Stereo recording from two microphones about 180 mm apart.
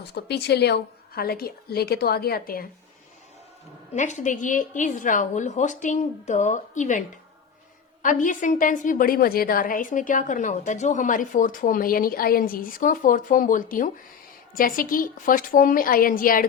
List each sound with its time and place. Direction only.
0.0 s a woman's voice: 65° left (ahead or behind)
3.9 s a woman's voice: 40° left (ahead or behind)
8.0 s a woman's voice: 45° left (ahead or behind)